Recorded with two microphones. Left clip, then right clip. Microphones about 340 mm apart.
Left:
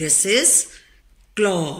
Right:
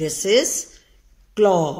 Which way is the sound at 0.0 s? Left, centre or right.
Right.